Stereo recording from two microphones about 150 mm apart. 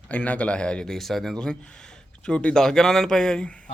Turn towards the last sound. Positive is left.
turn(degrees=5)  # may be behind; listen again after turning